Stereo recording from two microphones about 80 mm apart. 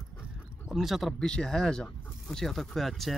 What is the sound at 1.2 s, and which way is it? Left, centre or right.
Speech, centre.